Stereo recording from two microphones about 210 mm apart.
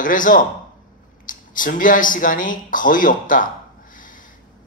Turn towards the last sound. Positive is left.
turn(degrees=40)  # may be behind; listen again after turning